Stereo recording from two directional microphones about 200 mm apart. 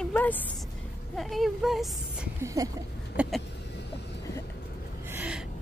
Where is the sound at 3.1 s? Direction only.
5° right (ahead or behind).